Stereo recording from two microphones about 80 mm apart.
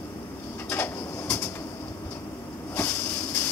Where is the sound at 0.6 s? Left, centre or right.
Left.